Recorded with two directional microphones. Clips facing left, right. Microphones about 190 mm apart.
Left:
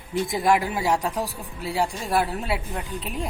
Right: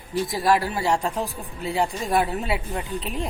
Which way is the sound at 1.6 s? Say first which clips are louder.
Right 1 dB; centre (ahead or behind).